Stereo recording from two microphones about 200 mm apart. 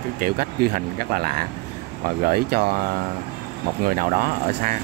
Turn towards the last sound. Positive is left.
turn(degrees=-45)  # may be behind; listen again after turning